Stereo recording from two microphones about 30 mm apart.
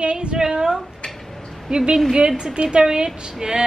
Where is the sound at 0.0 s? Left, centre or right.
Right.